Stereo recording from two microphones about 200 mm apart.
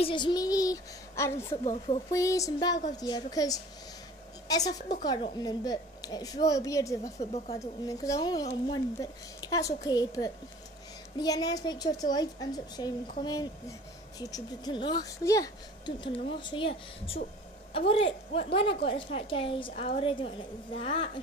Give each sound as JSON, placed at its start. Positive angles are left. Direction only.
{"t": 0.0, "sound": "speech", "side_deg": 25}
{"t": 1.6, "sound": "speech", "side_deg": 30}
{"t": 2.1, "sound": "a woman's voice", "side_deg": 15}
{"t": 7.2, "sound": "speech", "side_deg": 35}
{"t": 7.5, "sound": "a woman's voice", "side_deg": 15}